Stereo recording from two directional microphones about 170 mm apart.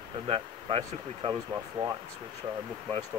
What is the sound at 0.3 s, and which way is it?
Speech, 35° right (ahead or behind).